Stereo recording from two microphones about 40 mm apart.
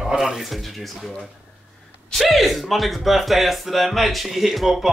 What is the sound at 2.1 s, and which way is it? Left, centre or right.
Speech, centre.